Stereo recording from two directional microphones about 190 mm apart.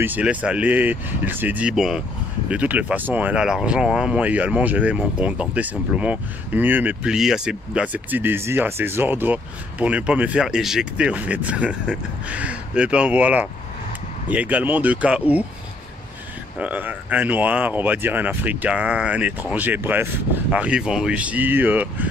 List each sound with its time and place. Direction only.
0.0 s speech: 10° right (ahead or behind)
16.5 s speech: 10° right (ahead or behind)